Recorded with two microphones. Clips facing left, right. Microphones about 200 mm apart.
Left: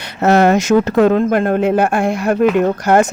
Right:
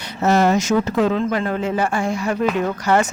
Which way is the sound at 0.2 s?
65° left (ahead or behind).